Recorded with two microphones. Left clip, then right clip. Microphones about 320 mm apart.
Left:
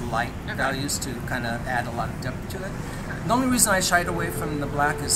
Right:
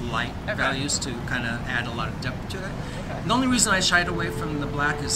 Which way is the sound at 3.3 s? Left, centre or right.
Centre.